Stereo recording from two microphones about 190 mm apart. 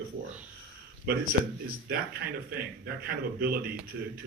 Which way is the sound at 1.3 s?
55° right (ahead or behind).